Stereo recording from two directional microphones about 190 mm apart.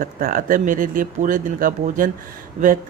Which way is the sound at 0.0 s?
50° right (ahead or behind).